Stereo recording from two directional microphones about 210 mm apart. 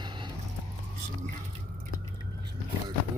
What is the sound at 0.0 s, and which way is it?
Vehicle, 20° right (ahead or behind).